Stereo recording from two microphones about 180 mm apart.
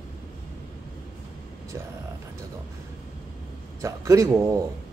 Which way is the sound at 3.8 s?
15° right (ahead or behind).